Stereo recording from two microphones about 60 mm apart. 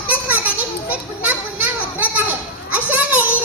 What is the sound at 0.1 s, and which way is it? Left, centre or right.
Children playing, right.